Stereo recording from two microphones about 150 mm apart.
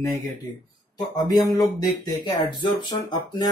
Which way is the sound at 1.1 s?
25° left (ahead or behind).